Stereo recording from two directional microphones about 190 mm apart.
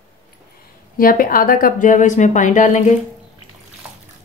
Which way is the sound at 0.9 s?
50° left (ahead or behind).